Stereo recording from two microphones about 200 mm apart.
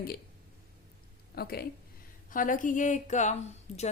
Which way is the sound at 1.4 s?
50° left (ahead or behind).